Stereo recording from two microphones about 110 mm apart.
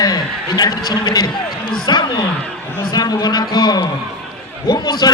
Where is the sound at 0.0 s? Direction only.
40° left (ahead or behind).